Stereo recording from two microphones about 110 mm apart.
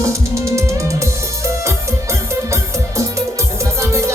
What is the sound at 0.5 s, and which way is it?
Music, 30° right (ahead or behind).